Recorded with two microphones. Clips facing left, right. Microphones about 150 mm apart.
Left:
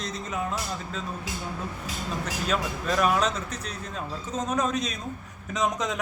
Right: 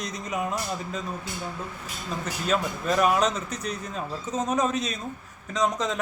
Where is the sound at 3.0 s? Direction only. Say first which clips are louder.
Right 2 dB; 10° right (ahead or behind).